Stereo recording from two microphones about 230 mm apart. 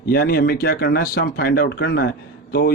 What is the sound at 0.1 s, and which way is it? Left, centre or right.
Speech, left.